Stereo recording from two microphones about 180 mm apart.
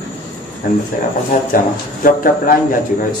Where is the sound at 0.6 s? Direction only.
50° left (ahead or behind).